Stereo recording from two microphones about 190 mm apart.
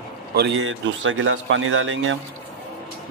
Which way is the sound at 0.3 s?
70° right (ahead or behind).